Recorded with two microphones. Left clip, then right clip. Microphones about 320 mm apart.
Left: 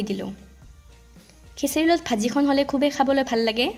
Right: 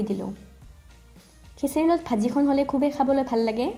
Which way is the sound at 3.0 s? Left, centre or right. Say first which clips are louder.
Left 1 dB; left.